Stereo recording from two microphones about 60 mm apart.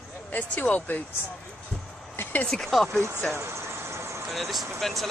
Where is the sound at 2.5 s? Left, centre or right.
Centre.